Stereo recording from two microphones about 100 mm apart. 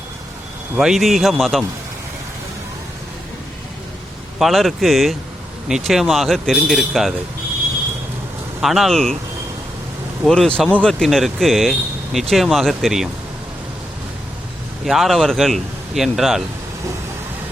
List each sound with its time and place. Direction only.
0.8 s speech: centre (ahead or behind)
4.4 s speech: centre (ahead or behind)
8.6 s speech: centre (ahead or behind)
10.2 s speech: 5° left (ahead or behind)
14.8 s speech: centre (ahead or behind)